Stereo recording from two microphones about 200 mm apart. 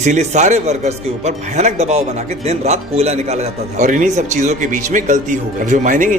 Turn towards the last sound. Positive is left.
turn(degrees=-40)  # may be behind; listen again after turning